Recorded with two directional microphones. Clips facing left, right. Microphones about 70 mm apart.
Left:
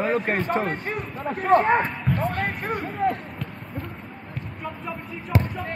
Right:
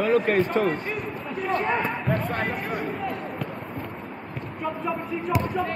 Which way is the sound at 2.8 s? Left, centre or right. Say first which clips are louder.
Left 4 dB; left.